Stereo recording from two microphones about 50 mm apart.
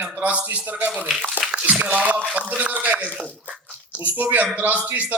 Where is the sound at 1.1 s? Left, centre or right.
Centre.